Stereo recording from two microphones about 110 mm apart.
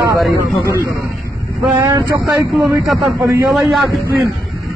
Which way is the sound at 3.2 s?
25° right (ahead or behind).